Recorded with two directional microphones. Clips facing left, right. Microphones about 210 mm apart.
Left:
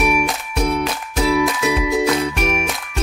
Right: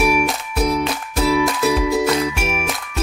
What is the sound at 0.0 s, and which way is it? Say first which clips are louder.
Music: right 1 dB; centre (ahead or behind).